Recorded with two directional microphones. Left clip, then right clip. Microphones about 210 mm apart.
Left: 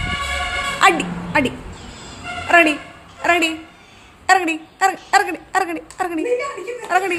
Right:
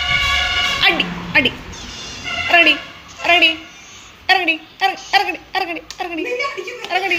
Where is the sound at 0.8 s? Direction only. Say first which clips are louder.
Left 1 dB; 25° left (ahead or behind).